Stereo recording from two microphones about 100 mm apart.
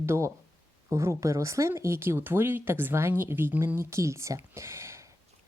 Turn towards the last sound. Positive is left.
turn(degrees=-25)  # may be behind; listen again after turning